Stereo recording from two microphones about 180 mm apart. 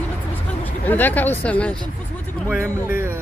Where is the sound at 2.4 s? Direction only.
10° right (ahead or behind).